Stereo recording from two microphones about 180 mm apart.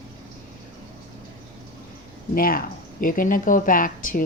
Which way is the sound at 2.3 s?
50° left (ahead or behind).